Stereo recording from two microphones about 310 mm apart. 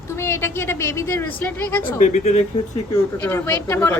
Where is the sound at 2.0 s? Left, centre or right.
Left.